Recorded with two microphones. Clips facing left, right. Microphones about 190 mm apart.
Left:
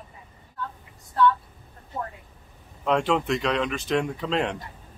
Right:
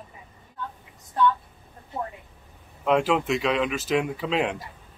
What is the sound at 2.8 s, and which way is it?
Speech, 5° right (ahead or behind).